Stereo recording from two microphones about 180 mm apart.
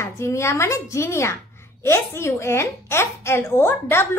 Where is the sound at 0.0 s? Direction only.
15° left (ahead or behind).